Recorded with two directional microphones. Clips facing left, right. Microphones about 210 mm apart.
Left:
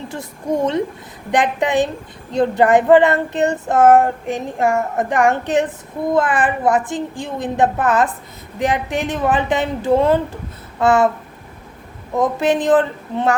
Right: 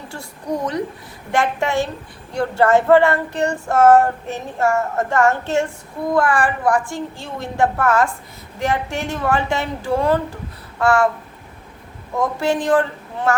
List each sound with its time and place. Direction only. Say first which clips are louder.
0.1 s a woman's voice: left 3 dB; 20° left (ahead or behind)
1.3 s child singing: left 2 dB; 20° left (ahead or behind)
6.1 s a woman's voice: even; 20° left (ahead or behind)
12.1 s a woman's voice: left 3 dB; 20° left (ahead or behind)